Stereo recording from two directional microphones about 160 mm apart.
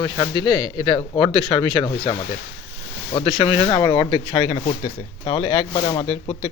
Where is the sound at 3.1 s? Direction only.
35° left (ahead or behind).